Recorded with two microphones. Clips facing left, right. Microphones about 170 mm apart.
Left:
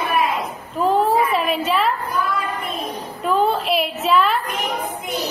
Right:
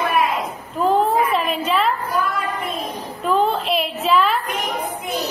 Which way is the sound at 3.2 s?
5° left (ahead or behind).